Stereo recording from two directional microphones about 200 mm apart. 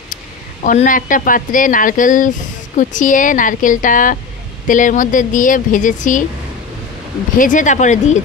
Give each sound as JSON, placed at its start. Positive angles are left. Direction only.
{"t": 0.7, "sound": "speech", "side_deg": 40}
{"t": 7.3, "sound": "speech", "side_deg": 40}